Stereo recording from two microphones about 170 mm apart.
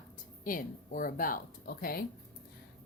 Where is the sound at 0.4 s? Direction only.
55° left (ahead or behind).